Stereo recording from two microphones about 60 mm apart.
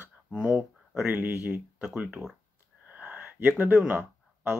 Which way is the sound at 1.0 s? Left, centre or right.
Right.